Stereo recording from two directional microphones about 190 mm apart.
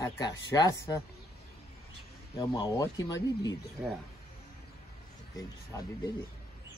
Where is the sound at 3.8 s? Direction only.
10° right (ahead or behind).